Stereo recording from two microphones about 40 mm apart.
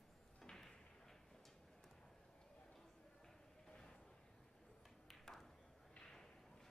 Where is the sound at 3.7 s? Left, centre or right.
Centre.